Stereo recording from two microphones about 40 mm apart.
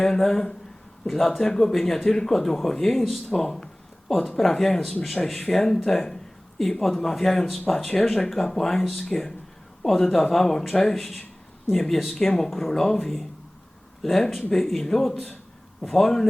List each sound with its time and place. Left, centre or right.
0.0 s speech: centre